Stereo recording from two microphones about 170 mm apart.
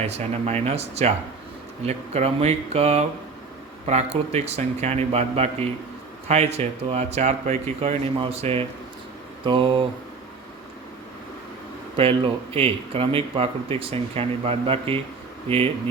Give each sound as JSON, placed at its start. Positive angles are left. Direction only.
{"t": 0.0, "sound": "speech", "side_deg": -40}
{"t": 11.9, "sound": "speech", "side_deg": -35}